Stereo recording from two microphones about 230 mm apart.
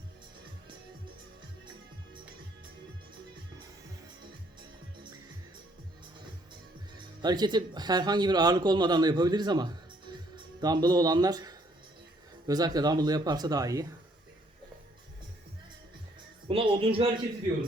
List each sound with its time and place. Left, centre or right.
6.9 s speech: centre
16.5 s speech: right